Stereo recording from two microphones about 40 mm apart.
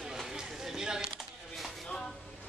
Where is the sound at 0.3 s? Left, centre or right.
Centre.